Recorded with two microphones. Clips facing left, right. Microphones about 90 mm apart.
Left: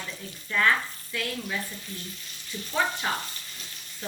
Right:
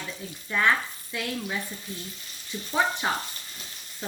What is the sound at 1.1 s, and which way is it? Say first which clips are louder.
Speech: right 1 dB; 20° right (ahead or behind).